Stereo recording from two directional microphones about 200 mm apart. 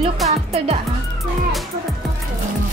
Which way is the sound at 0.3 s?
30° right (ahead or behind).